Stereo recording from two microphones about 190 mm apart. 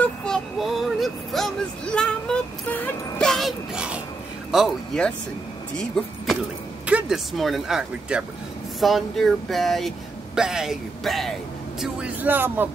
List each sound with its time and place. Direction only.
0.0 s child singing: 5° left (ahead or behind)
4.5 s speech: centre (ahead or behind)